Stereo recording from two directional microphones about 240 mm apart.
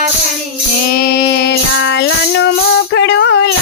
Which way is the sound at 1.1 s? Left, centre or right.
Left.